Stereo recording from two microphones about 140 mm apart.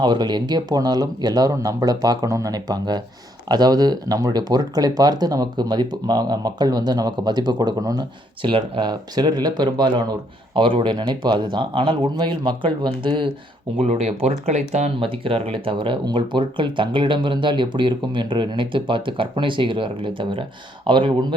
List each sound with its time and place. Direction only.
0.0 s speech: 30° right (ahead or behind)
8.4 s speech: 40° right (ahead or behind)
13.7 s speech: 50° right (ahead or behind)
14.9 s speech: 40° right (ahead or behind)